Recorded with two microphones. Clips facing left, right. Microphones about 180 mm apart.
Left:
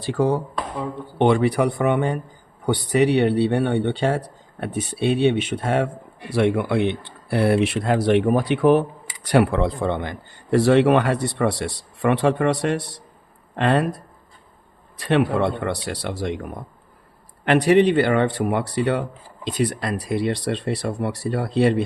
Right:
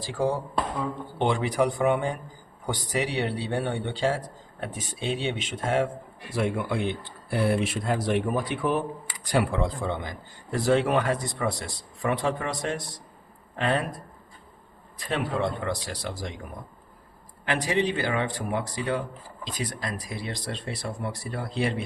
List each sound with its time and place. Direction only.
0.0 s a man's voice: 60° left (ahead or behind)
14.9 s a man's voice: 70° left (ahead or behind)
17.4 s a man's voice: 65° left (ahead or behind)